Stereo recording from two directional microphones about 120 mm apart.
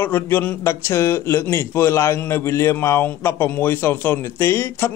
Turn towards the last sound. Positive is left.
turn(degrees=20)  # may be behind; listen again after turning